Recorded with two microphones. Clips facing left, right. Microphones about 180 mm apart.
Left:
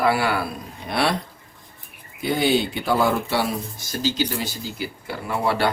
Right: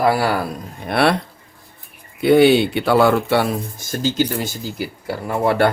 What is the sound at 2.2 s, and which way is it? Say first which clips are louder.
Speech: right 9 dB; 65° right (ahead or behind).